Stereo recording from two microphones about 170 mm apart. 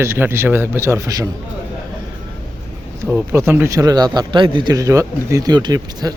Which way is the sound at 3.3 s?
15° right (ahead or behind).